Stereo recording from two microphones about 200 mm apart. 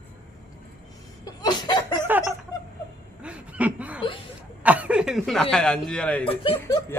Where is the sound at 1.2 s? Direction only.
20° left (ahead or behind).